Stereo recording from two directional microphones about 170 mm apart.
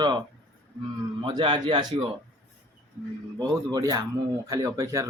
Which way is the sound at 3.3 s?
25° right (ahead or behind).